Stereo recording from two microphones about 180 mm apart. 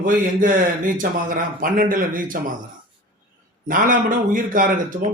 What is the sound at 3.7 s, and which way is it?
Speech, 50° right (ahead or behind).